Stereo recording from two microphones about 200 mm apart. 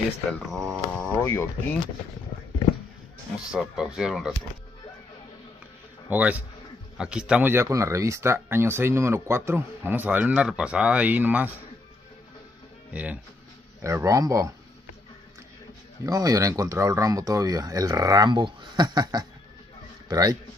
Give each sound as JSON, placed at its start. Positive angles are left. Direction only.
{"t": 0.3, "sound": "speech", "side_deg": 0}
{"t": 3.5, "sound": "speech", "side_deg": -5}
{"t": 6.0, "sound": "speech", "side_deg": -10}
{"t": 12.9, "sound": "speech", "side_deg": -5}
{"t": 16.1, "sound": "a man's voice", "side_deg": -15}